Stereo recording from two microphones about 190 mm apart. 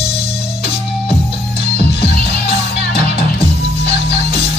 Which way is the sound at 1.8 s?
30° left (ahead or behind).